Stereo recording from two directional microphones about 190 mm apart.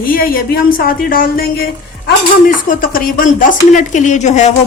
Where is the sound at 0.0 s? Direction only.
50° left (ahead or behind).